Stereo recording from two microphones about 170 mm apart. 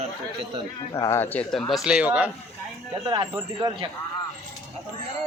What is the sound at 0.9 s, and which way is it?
Speech, 20° left (ahead or behind).